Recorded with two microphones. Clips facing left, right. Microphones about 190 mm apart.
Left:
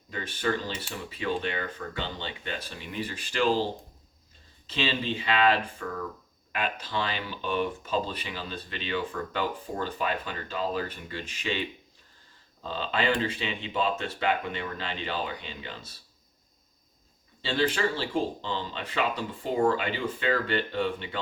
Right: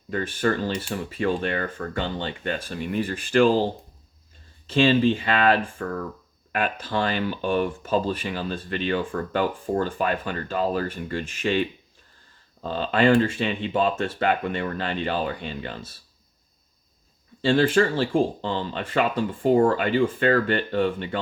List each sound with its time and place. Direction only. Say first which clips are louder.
0.1 s speech: right 6 dB; 50° right (ahead or behind)
4.6 s speech: right 11 dB; 50° right (ahead or behind)
12.6 s speech: right 8 dB; 50° right (ahead or behind)
17.4 s speech: right 8 dB; 50° right (ahead or behind)